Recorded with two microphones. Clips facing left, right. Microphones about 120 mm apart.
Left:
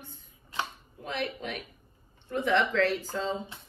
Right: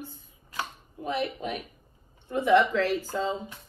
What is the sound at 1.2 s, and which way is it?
Speech, 40° right (ahead or behind).